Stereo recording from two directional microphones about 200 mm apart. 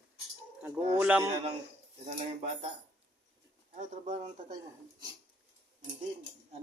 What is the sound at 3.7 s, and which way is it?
Speech, 35° right (ahead or behind).